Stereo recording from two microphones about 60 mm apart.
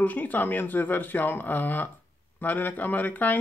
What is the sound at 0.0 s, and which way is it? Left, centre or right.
Speech, left.